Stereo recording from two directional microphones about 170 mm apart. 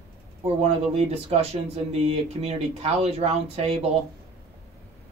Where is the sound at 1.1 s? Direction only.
40° right (ahead or behind).